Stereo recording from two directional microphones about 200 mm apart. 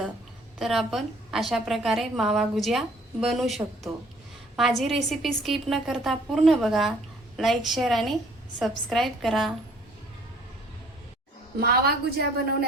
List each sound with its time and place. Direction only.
0.6 s a woman's voice: centre (ahead or behind)
4.8 s a woman's voice: centre (ahead or behind)
11.6 s a woman's voice: 50° right (ahead or behind)